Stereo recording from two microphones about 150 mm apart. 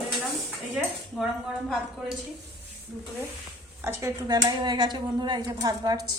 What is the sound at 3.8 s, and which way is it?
A woman's voice, 20° right (ahead or behind).